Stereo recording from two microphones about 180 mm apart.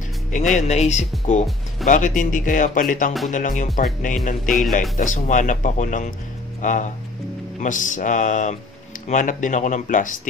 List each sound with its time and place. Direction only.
0.6 s speech: 40° left (ahead or behind)